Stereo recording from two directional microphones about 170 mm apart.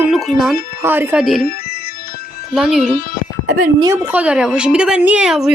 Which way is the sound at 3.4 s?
55° right (ahead or behind).